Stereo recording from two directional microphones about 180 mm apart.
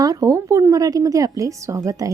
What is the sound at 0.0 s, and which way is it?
A woman's voice, 20° right (ahead or behind).